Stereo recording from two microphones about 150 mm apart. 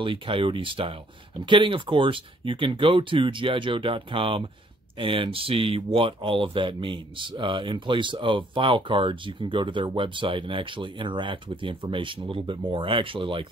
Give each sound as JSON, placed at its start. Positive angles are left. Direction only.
{"t": 0.0, "sound": "speech", "side_deg": -35}